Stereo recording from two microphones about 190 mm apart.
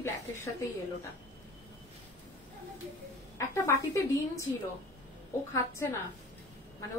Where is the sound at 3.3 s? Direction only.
15° left (ahead or behind).